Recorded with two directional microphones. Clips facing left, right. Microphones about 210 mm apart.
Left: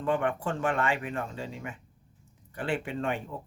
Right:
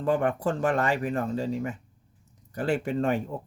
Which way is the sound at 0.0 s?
40° right (ahead or behind).